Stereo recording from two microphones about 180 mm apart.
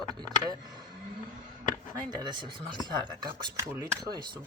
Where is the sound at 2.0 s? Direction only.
25° right (ahead or behind).